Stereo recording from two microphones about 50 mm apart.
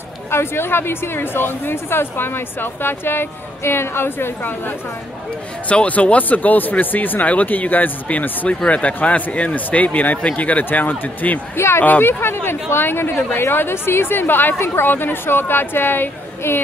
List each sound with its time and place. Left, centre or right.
0.3 s speech: left
5.7 s speech: left
11.5 s speech: left
11.8 s speech: left